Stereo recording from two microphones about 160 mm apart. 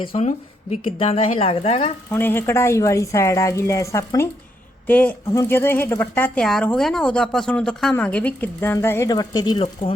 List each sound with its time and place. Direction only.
0.0 s speech: 35° left (ahead or behind)
2.0 s speech: 15° left (ahead or behind); by 9.9 s 30° left (ahead or behind)